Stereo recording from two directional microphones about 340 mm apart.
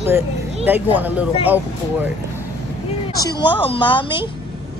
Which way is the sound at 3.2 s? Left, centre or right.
Centre.